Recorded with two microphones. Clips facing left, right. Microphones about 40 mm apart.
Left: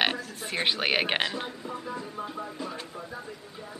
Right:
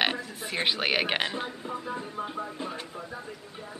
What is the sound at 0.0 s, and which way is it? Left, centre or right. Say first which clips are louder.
A man's voice: even; centre.